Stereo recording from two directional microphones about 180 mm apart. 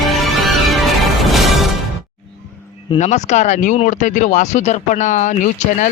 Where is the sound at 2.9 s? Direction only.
40° left (ahead or behind).